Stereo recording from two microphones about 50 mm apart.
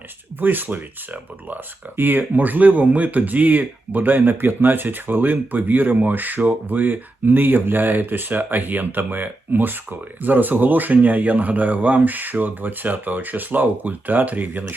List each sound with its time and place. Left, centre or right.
0.3 s speech: right